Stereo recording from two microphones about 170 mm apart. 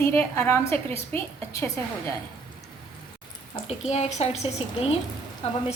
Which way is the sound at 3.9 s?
40° left (ahead or behind).